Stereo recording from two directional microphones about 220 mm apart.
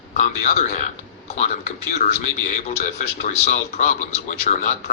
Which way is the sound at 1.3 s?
30° left (ahead or behind).